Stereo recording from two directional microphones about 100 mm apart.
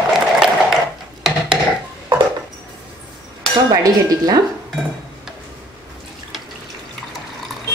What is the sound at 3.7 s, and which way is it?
Speech, 40° right (ahead or behind).